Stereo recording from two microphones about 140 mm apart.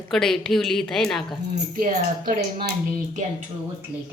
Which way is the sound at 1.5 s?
75° right (ahead or behind).